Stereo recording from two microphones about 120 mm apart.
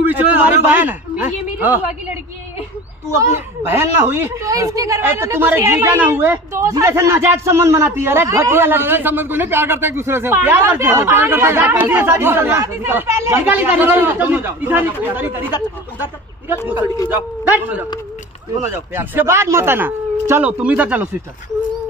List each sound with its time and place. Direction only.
0.0 s a man's voice: 15° right (ahead or behind)
3.3 s a woman's voice: 20° right (ahead or behind)
16.6 s a man's voice: 15° right (ahead or behind)
18.6 s a woman's voice: 20° right (ahead or behind)